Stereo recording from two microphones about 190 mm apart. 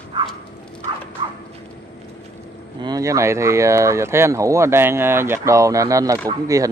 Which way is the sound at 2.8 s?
20° right (ahead or behind).